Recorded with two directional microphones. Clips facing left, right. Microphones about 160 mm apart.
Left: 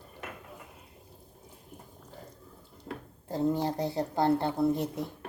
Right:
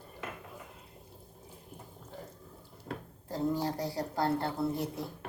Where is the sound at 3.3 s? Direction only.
20° left (ahead or behind).